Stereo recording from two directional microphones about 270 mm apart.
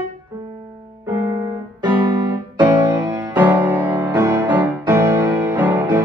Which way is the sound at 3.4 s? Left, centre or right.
Centre.